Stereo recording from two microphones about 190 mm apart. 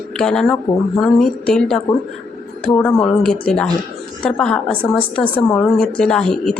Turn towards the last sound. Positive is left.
turn(degrees=5)  # may be behind; listen again after turning